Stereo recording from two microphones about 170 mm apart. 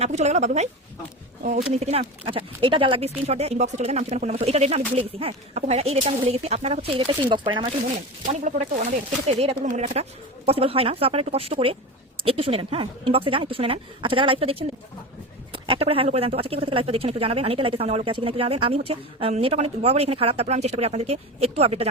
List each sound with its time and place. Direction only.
0.0 s a woman's voice: 40° right (ahead or behind)
1.7 s speech: 40° right (ahead or behind)
8.3 s speech: 45° right (ahead or behind)